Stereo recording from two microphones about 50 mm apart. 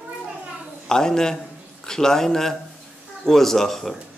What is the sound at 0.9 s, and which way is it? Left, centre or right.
A man's voice, centre.